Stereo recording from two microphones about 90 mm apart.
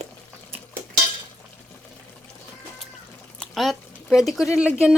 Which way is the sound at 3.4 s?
5° left (ahead or behind).